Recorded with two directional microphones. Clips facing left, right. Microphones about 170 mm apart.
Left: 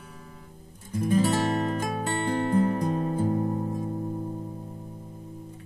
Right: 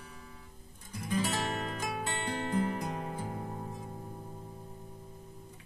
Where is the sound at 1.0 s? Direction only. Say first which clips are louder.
Left 9 dB; 45° left (ahead or behind).